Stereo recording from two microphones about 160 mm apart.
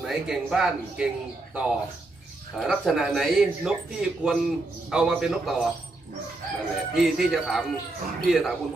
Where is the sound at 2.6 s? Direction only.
Centre (ahead or behind).